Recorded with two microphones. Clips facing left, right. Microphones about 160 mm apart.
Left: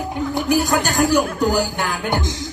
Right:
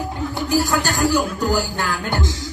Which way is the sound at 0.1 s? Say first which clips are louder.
Left 3 dB; 20° left (ahead or behind).